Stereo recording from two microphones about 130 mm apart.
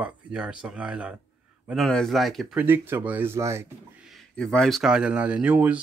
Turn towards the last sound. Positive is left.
turn(degrees=-10)  # may be behind; listen again after turning